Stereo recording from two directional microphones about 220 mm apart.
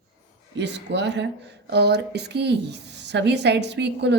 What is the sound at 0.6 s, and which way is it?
A woman's voice, 50° right (ahead or behind).